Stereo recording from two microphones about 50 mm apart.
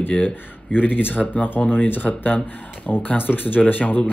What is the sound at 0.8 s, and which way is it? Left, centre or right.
Speech, left.